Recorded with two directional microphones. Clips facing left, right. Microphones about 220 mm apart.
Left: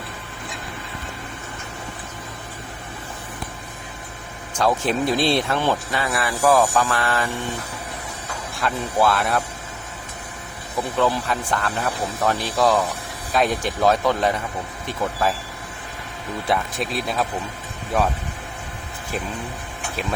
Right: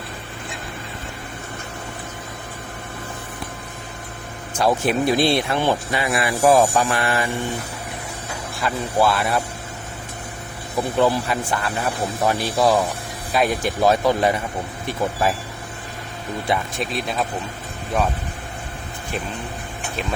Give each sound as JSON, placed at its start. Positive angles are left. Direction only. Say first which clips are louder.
{"t": 4.5, "sound": "speech", "louder": "right 2 dB", "side_deg": -10}
{"t": 8.6, "sound": "speech", "louder": "right 1 dB", "side_deg": 0}
{"t": 10.8, "sound": "speech", "louder": "right 3 dB", "side_deg": -10}
{"t": 16.5, "sound": "speech", "louder": "even", "side_deg": 0}